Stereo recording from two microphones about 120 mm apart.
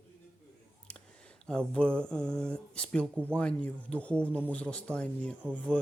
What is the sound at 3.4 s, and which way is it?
Speech, 10° left (ahead or behind).